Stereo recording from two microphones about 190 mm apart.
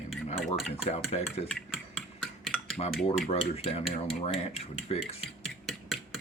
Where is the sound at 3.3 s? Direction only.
30° left (ahead or behind).